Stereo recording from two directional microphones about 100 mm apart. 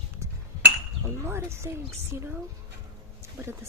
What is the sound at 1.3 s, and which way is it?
Speech, 25° right (ahead or behind).